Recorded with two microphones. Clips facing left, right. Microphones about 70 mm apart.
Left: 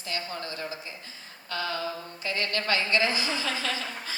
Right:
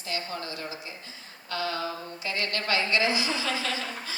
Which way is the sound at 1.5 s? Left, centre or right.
Left.